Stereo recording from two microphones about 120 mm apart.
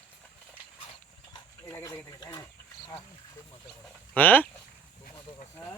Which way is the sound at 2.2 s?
30° left (ahead or behind).